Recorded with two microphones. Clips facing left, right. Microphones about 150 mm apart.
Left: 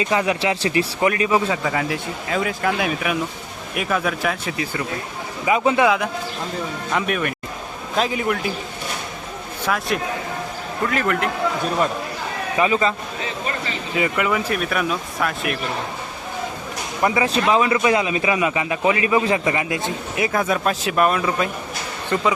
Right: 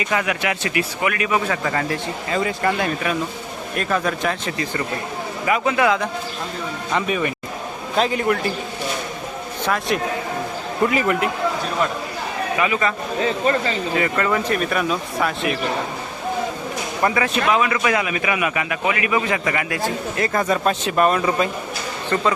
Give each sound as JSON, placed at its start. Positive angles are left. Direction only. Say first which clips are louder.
{"t": 0.0, "sound": "a man's voice", "louder": "left 2 dB", "side_deg": 25}
{"t": 1.6, "sound": "speech", "louder": "even", "side_deg": 5}
{"t": 5.5, "sound": "a man's voice", "louder": "left 2 dB", "side_deg": 20}
{"t": 6.9, "sound": "speech", "louder": "right 1 dB", "side_deg": 0}
{"t": 9.6, "sound": "a man's voice", "louder": "right 1 dB", "side_deg": 0}
{"t": 12.5, "sound": "a man's voice", "louder": "left 3 dB", "side_deg": 30}
{"t": 13.9, "sound": "speech", "louder": "left 1 dB", "side_deg": 15}
{"t": 17.2, "sound": "a man's voice", "louder": "left 2 dB", "side_deg": 30}
{"t": 20.1, "sound": "speech", "louder": "left 1 dB", "side_deg": 5}
{"t": 22.1, "sound": "speech", "louder": "even", "side_deg": 10}